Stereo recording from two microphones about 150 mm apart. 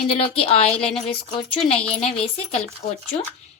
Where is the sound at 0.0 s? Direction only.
40° left (ahead or behind).